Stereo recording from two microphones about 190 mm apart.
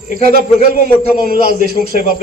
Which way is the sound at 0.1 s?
50° right (ahead or behind).